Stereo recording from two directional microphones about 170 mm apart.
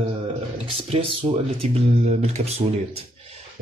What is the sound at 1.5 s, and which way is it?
Speech, 35° right (ahead or behind).